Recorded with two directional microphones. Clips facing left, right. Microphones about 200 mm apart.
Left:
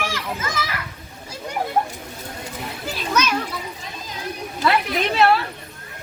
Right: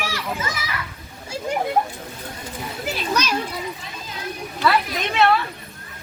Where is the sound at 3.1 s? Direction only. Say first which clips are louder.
Left 2 dB; 35° right (ahead or behind).